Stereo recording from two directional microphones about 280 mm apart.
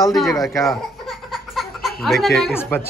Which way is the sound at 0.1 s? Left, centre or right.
Centre.